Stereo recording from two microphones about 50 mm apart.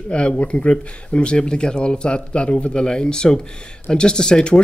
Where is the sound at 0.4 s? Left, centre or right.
Left.